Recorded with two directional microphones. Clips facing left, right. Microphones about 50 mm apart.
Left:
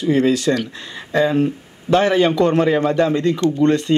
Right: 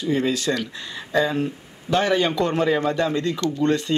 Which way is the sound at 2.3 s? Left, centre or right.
Left.